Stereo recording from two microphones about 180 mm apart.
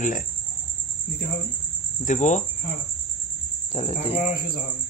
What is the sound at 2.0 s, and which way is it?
Speech, 40° left (ahead or behind).